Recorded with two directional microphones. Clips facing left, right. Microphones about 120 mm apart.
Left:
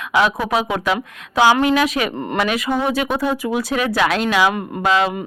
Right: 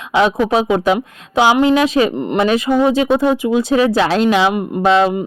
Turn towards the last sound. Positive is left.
turn(degrees=-30)  # may be behind; listen again after turning